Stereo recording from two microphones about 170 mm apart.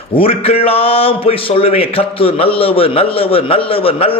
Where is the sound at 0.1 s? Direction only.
35° left (ahead or behind).